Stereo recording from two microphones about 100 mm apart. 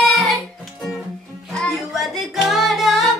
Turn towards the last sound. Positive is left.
turn(degrees=-5)  # may be behind; listen again after turning